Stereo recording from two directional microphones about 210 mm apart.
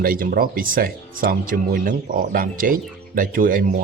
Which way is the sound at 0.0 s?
45° right (ahead or behind).